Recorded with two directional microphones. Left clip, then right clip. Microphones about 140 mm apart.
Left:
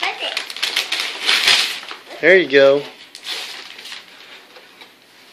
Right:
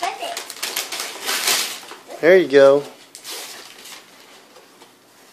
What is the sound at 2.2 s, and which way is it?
Speech, 10° right (ahead or behind).